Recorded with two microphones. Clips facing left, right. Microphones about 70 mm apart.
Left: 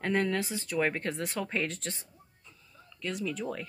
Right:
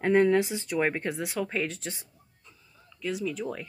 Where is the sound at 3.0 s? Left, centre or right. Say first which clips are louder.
Right 3 dB; centre.